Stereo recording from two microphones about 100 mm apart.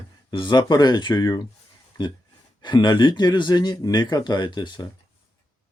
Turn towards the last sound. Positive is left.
turn(degrees=50)  # may be behind; listen again after turning